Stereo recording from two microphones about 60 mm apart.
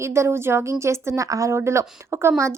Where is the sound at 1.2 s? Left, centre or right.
Right.